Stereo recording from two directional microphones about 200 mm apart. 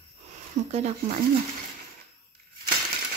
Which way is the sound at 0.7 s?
35° right (ahead or behind).